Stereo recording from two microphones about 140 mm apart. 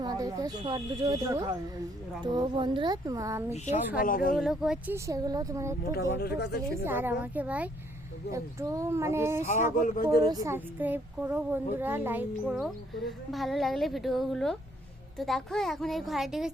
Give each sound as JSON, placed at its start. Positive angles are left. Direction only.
{"t": 0.0, "sound": "speech", "side_deg": -30}
{"t": 4.0, "sound": "speech", "side_deg": 85}
{"t": 4.4, "sound": "a woman's voice", "side_deg": -5}
{"t": 4.9, "sound": "speech", "side_deg": -25}
{"t": 5.8, "sound": "speech", "side_deg": 90}
{"t": 6.8, "sound": "speech", "side_deg": -15}
{"t": 8.3, "sound": "speech", "side_deg": -20}
{"t": 9.7, "sound": "speech", "side_deg": 75}
{"t": 10.2, "sound": "speech", "side_deg": -25}
{"t": 10.5, "sound": "speech", "side_deg": -15}
{"t": 12.5, "sound": "a woman's voice", "side_deg": 0}